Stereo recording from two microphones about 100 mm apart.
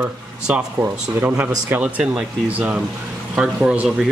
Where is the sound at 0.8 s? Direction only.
20° right (ahead or behind).